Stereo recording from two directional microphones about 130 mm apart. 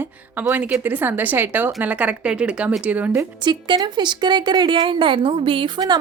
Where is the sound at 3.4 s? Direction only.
35° right (ahead or behind).